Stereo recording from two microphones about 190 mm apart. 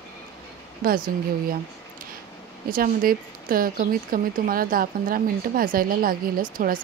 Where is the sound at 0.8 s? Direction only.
50° right (ahead or behind).